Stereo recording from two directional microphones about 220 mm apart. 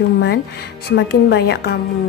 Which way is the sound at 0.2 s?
45° left (ahead or behind).